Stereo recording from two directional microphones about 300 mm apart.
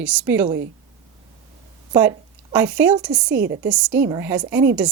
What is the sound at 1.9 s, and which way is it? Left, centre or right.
Speech, centre.